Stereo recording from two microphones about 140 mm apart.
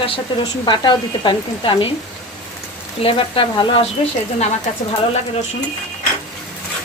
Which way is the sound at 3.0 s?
40° left (ahead or behind).